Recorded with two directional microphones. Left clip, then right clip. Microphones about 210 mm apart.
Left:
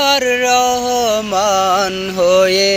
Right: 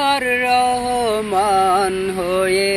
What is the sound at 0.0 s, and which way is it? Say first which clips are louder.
Music: left 4 dB; 50° left (ahead or behind).